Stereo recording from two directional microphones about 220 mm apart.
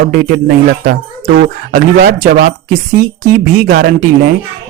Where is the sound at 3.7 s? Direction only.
45° right (ahead or behind).